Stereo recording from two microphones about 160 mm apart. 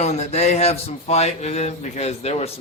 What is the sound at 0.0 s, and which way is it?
Speech, 45° left (ahead or behind).